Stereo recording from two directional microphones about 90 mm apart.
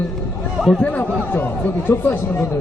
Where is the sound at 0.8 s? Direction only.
15° left (ahead or behind).